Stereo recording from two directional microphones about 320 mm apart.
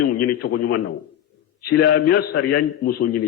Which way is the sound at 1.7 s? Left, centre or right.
Left.